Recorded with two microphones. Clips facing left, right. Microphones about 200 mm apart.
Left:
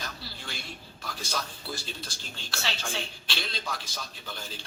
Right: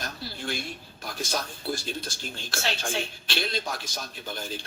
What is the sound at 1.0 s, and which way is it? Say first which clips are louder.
Speech: right 4 dB; 50° right (ahead or behind).